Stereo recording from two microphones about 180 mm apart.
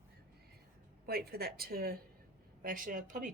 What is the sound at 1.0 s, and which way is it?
A woman's voice, 60° right (ahead or behind).